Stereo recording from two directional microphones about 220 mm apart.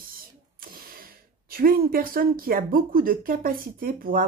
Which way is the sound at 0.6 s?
40° right (ahead or behind).